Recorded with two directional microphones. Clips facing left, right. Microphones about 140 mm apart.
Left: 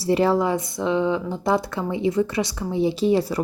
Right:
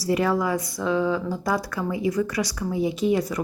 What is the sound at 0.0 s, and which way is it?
Speech, 30° left (ahead or behind).